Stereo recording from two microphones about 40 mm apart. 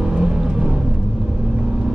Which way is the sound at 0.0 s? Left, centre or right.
Centre.